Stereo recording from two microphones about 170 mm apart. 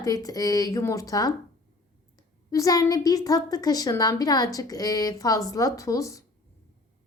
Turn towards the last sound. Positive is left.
turn(degrees=20)  # may be behind; listen again after turning